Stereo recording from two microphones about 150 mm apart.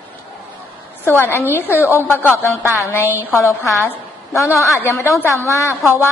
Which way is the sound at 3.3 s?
20° left (ahead or behind).